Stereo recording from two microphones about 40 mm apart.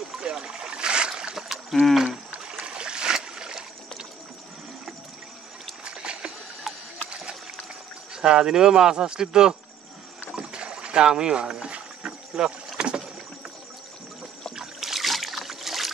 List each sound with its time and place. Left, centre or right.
0.1 s splash: centre
1.3 s a sound: centre
2.6 s trickle: right
5.9 s rowboat: right
6.7 s a sound: centre
8.1 s speech: centre
10.3 s rowboat: right
14.5 s boat: centre